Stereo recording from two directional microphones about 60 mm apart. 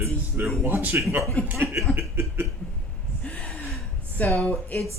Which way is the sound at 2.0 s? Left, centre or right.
Right.